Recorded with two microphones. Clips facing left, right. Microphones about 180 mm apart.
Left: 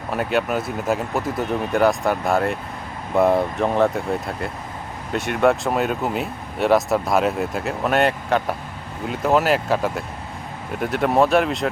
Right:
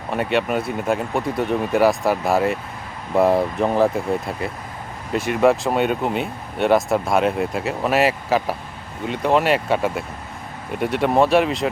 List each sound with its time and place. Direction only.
0.1 s speech: centre (ahead or behind)